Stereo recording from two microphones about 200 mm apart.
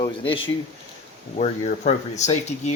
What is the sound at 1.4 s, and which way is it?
Speech, 35° left (ahead or behind).